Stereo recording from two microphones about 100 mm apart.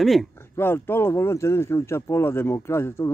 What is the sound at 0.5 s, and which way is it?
Speech, 20° left (ahead or behind).